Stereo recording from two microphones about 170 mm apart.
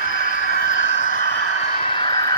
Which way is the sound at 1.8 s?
30° left (ahead or behind).